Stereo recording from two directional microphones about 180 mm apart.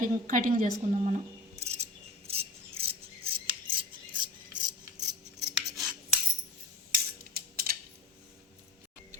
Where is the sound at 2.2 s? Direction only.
35° right (ahead or behind).